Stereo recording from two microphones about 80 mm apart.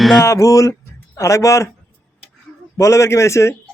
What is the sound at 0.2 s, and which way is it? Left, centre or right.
Speech, left.